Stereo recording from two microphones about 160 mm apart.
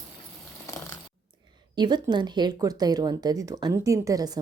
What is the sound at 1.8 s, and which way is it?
Speech, 25° right (ahead or behind).